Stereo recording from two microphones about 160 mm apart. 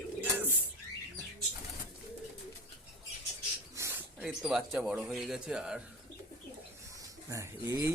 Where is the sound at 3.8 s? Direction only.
20° right (ahead or behind).